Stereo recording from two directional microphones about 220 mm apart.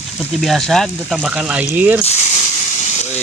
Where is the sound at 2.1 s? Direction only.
30° left (ahead or behind).